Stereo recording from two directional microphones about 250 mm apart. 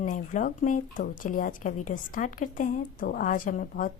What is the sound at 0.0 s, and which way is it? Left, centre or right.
Speech, left.